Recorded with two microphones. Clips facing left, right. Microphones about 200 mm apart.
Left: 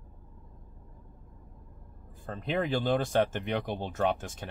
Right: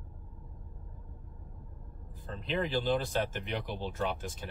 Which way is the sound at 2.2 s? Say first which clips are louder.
Left 3 dB; 50° left (ahead or behind).